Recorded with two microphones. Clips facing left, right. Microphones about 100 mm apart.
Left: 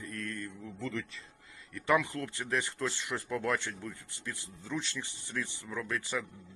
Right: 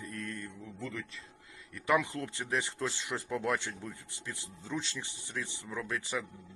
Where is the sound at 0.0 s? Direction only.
15° right (ahead or behind).